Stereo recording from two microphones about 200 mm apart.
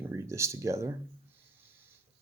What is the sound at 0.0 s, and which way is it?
Speech, 15° right (ahead or behind).